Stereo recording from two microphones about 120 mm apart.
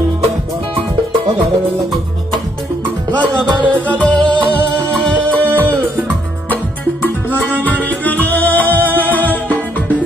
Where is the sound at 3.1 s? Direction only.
40° right (ahead or behind).